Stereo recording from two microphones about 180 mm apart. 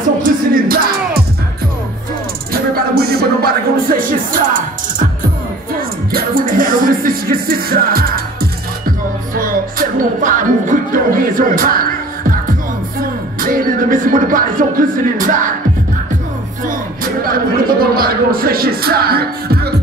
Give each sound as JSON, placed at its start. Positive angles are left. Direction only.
{"t": 0.2, "sound": "music", "side_deg": -50}
{"t": 2.5, "sound": "speech", "side_deg": -60}
{"t": 6.1, "sound": "music", "side_deg": -50}
{"t": 16.6, "sound": "speech", "side_deg": -55}